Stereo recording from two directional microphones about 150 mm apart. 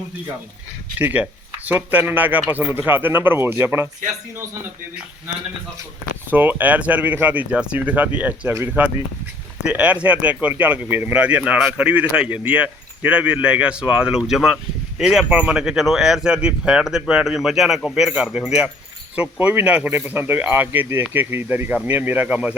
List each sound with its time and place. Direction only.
0.9 s speech: 10° right (ahead or behind)
6.3 s speech: 10° right (ahead or behind)